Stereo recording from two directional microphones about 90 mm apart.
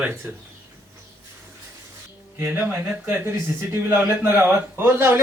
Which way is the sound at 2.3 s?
25° right (ahead or behind).